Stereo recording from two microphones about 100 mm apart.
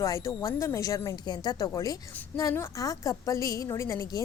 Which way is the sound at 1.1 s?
45° left (ahead or behind).